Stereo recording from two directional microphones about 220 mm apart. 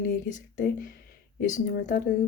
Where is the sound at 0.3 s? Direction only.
35° left (ahead or behind).